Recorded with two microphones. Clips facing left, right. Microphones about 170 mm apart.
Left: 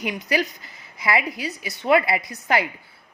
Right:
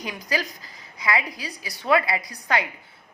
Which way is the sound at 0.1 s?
25° left (ahead or behind).